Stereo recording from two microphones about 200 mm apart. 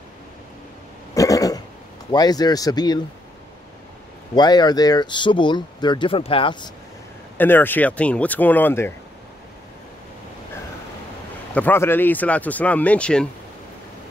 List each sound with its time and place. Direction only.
1.1 s a sound: 15° left (ahead or behind)
2.0 s speech: 20° left (ahead or behind)
4.4 s speech: 20° left (ahead or behind)
7.3 s speech: 10° left (ahead or behind)
11.5 s speech: 10° left (ahead or behind)